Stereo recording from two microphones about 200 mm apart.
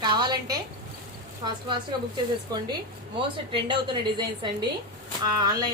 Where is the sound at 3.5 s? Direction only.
25° right (ahead or behind).